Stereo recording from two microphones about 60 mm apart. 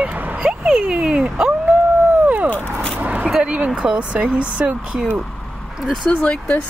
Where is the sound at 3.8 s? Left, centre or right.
Centre.